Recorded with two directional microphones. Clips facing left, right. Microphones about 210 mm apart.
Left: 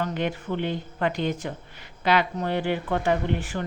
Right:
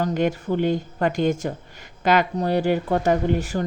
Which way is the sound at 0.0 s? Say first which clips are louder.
Right 5 dB; 45° right (ahead or behind).